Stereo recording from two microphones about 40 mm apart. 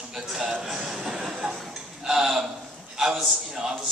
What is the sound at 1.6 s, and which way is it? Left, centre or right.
Speech, centre.